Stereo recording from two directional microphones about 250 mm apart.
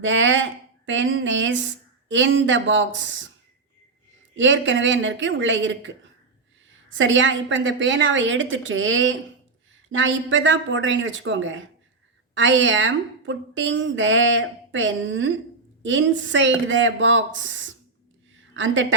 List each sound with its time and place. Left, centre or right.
0.0 s a woman's voice: right
4.4 s a woman's voice: right